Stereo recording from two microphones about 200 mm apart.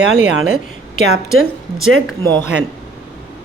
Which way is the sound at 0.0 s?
90° right.